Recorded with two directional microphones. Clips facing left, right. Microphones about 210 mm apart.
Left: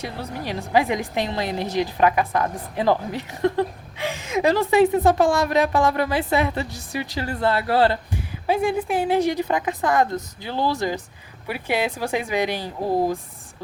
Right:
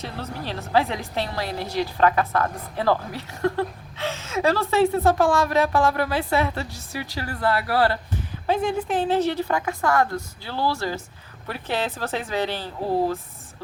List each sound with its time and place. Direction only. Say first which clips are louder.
0.0 s a woman's voice: left 2 dB; 15° left (ahead or behind)
8.4 s a woman's voice: left 2 dB; 10° left (ahead or behind)